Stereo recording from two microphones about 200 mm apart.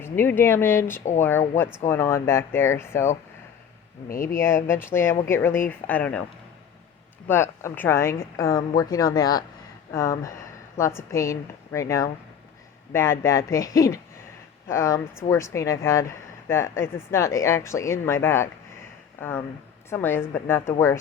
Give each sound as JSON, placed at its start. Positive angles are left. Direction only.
{"t": 0.0, "sound": "speech", "side_deg": 10}
{"t": 4.1, "sound": "speech", "side_deg": 45}
{"t": 4.4, "sound": "speech", "side_deg": 15}
{"t": 7.3, "sound": "speech", "side_deg": 10}
{"t": 19.9, "sound": "speech", "side_deg": 10}